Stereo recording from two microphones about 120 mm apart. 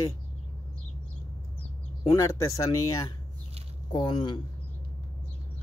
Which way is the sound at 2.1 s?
25° left (ahead or behind).